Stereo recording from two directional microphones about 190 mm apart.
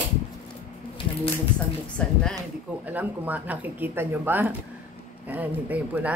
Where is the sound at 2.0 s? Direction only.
5° left (ahead or behind).